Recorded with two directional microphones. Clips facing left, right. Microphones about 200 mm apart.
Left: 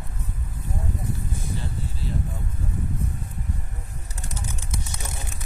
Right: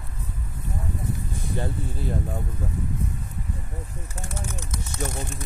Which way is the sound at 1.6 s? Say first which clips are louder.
Right 4 dB; 50° right (ahead or behind).